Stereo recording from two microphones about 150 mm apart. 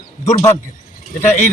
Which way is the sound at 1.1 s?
55° left (ahead or behind).